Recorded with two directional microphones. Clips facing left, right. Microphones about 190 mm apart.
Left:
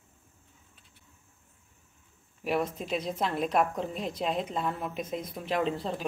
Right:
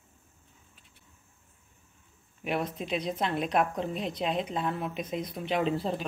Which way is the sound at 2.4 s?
Centre (ahead or behind).